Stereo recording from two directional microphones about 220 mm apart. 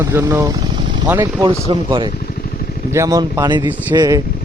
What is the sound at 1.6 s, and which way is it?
Speech, 25° right (ahead or behind).